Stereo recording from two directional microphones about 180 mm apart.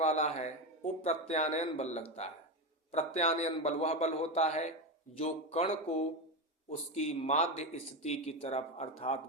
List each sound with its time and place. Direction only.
0.0 s speech: 40° left (ahead or behind)